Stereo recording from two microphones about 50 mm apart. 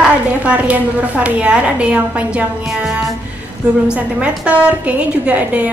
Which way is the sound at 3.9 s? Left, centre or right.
Right.